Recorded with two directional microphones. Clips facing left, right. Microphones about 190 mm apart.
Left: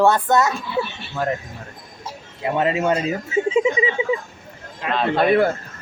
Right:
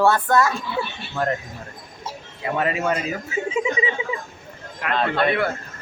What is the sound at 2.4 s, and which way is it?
A man's voice, 25° left (ahead or behind).